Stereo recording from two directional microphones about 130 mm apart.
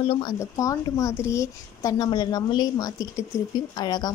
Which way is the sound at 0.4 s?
25° left (ahead or behind).